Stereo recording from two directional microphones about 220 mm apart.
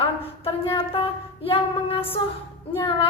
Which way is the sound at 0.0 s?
25° left (ahead or behind).